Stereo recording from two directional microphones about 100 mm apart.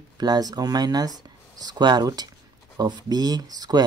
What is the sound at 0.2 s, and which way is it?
Speech, 40° right (ahead or behind).